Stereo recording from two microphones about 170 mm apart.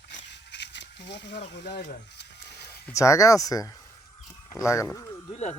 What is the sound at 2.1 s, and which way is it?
Printer, 75° left (ahead or behind).